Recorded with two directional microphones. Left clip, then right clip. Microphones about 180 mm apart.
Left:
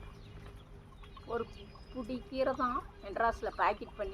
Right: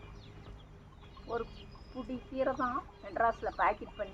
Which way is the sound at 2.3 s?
40° left (ahead or behind).